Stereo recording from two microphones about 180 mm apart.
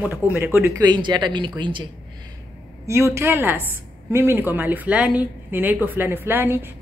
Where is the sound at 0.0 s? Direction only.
10° right (ahead or behind); by 1.9 s 25° right (ahead or behind).